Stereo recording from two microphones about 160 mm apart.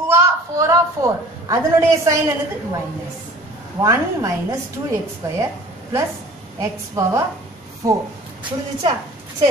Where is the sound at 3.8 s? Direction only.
20° right (ahead or behind).